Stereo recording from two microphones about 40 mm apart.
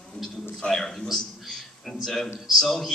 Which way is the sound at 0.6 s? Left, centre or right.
Centre.